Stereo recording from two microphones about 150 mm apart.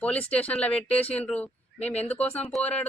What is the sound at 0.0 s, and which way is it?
Speech, 10° left (ahead or behind).